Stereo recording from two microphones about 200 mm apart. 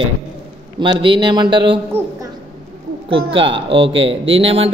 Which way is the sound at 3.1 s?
25° right (ahead or behind).